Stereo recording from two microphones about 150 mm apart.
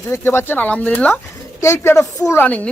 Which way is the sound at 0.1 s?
15° left (ahead or behind).